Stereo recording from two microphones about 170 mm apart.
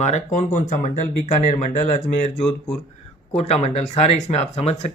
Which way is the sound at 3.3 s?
40° left (ahead or behind).